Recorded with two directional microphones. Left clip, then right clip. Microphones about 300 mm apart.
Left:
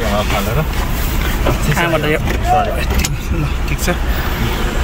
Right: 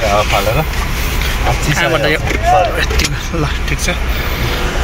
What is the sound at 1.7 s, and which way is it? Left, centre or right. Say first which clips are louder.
Speech: right 2 dB; centre.